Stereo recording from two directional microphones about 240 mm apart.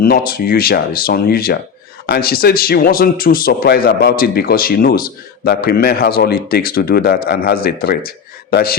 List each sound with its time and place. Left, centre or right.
0.0 s speech: left